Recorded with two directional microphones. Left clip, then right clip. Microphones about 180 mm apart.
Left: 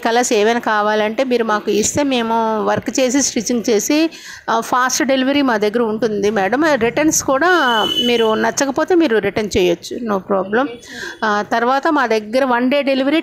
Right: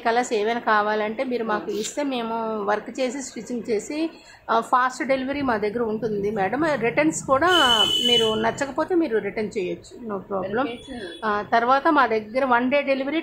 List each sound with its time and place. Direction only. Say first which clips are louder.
0.0 s speech: left 8 dB; 40° left (ahead or behind)